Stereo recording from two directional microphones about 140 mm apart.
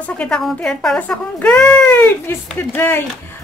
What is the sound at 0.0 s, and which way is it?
Speech, 5° left (ahead or behind).